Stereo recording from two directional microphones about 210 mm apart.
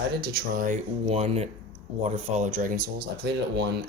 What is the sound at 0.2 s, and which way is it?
Speech, 45° right (ahead or behind).